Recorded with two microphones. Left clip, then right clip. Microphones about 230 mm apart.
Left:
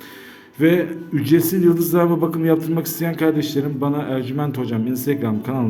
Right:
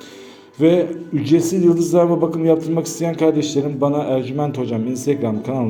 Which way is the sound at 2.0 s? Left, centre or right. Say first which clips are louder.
Right 3 dB; left.